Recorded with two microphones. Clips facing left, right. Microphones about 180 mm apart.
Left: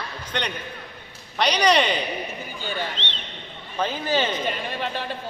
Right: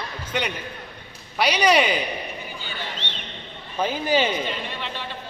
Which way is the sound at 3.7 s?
10° right (ahead or behind).